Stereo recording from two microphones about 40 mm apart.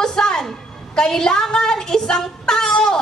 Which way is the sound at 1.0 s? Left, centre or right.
Centre.